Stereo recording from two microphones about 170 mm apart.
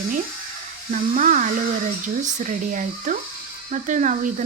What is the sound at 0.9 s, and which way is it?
Speech, 45° right (ahead or behind).